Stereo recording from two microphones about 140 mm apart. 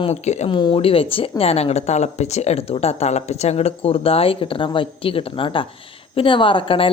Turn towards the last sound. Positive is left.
turn(degrees=40)  # may be behind; listen again after turning